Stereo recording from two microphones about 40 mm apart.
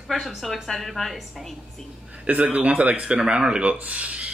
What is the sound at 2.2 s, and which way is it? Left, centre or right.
Speech, right.